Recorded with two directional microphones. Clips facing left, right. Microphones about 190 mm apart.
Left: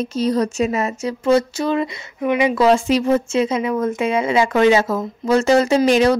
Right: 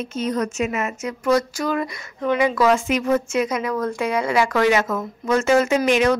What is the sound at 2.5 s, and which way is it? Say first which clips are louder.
A woman's voice: left 4 dB; 30° left (ahead or behind).